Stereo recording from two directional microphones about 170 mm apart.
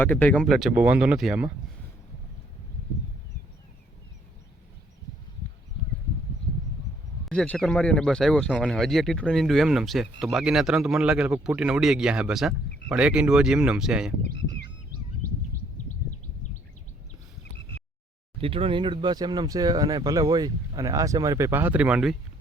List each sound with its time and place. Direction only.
0.0 s speech: 10° left (ahead or behind)
7.3 s speech: 5° left (ahead or behind)
14.3 s a sound: 90° left
18.3 s speech: 35° right (ahead or behind); by 22.1 s 5° right (ahead or behind)